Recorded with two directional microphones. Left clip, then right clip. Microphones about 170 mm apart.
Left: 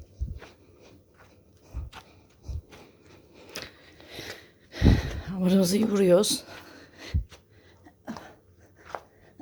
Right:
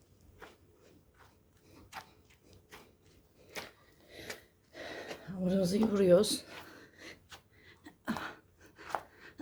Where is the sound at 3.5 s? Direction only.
40° left (ahead or behind).